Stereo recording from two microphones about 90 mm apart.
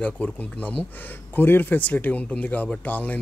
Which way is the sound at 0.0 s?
15° left (ahead or behind).